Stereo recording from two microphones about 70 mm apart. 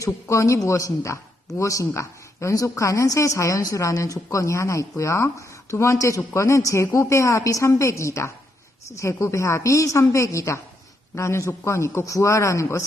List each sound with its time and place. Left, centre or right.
0.0 s speech: left